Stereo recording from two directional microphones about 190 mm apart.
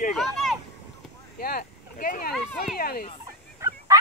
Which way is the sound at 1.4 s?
50° left (ahead or behind).